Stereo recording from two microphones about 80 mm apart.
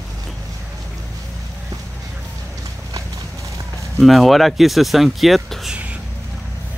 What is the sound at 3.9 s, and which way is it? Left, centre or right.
Speech, centre.